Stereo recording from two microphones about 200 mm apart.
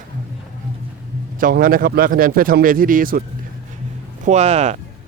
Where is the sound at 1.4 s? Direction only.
45° right (ahead or behind).